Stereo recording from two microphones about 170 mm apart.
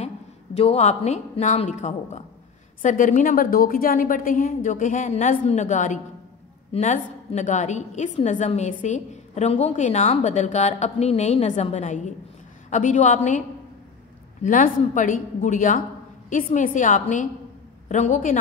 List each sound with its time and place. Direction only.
0.6 s a woman's voice: 40° left (ahead or behind)
14.4 s a woman's voice: 50° left (ahead or behind)